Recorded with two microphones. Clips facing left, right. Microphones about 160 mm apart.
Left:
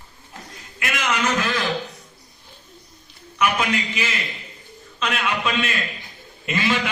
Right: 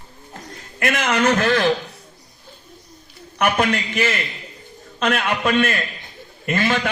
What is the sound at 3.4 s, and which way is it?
A man's voice, 55° right (ahead or behind).